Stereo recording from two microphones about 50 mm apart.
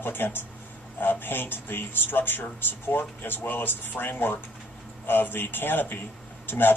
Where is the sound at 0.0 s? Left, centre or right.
Left.